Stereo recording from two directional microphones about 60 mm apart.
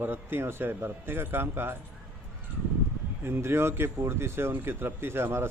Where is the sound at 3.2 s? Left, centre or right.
Right.